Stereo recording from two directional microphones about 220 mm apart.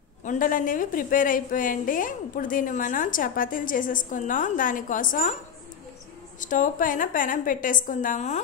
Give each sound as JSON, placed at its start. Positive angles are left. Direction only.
{"t": 0.2, "sound": "a woman's voice", "side_deg": 35}
{"t": 6.4, "sound": "a woman's voice", "side_deg": 35}